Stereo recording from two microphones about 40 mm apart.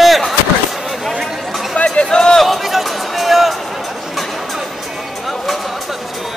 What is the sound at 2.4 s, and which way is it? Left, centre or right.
Speech, centre.